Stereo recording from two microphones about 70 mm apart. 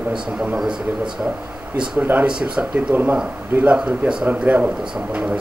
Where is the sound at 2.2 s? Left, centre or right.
Centre.